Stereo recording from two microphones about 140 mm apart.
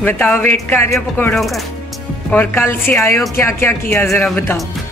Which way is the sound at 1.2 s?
Centre (ahead or behind).